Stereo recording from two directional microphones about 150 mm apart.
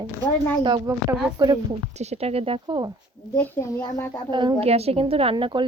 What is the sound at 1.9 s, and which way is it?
A woman's voice, 50° right (ahead or behind).